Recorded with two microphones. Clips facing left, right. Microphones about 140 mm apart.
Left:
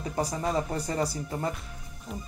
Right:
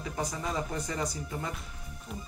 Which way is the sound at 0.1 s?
35° left (ahead or behind).